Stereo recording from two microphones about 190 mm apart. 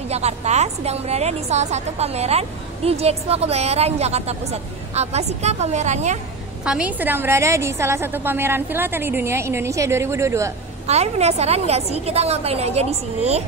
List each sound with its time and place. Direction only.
0.1 s a woman's voice: 35° right (ahead or behind)
6.6 s a woman's voice: 5° right (ahead or behind)
10.9 s a woman's voice: 35° right (ahead or behind)